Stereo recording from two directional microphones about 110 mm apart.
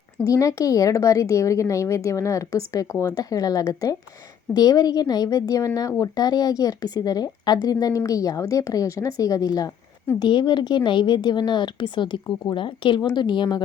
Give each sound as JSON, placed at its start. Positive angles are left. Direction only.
{"t": 0.3, "sound": "speech", "side_deg": 30}
{"t": 10.2, "sound": "a woman's voice", "side_deg": 45}